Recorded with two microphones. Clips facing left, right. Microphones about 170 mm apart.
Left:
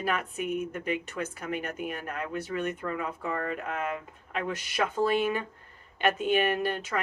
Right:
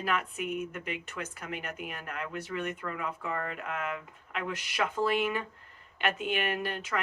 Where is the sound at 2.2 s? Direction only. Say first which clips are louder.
Left 3 dB; 30° left (ahead or behind).